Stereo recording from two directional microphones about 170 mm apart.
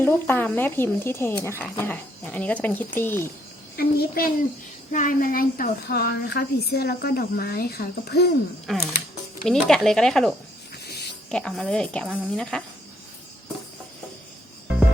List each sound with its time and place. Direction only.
0.0 s speech: 10° left (ahead or behind)
3.8 s a woman's voice: 60° left (ahead or behind)
8.6 s a woman's voice: centre (ahead or behind)